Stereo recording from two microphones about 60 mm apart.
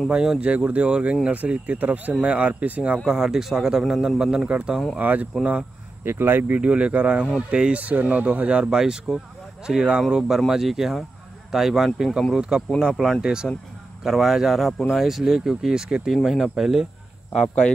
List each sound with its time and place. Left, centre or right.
0.1 s speech: centre
0.4 s speech: right
3.1 s speech: centre; by 5.3 s right
5.4 s speech: centre
6.0 s speech: right
6.5 s speech: right
14.0 s speech: centre
16.1 s speech: centre